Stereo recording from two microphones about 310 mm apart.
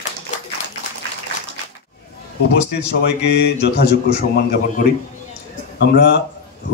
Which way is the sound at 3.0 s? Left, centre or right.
Left.